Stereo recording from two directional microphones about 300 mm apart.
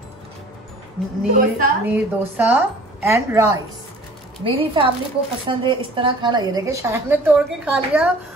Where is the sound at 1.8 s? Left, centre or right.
Centre.